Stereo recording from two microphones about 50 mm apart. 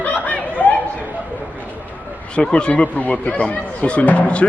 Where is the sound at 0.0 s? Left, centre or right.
Left.